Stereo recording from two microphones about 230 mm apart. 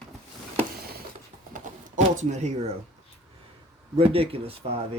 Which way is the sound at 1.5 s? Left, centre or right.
Right.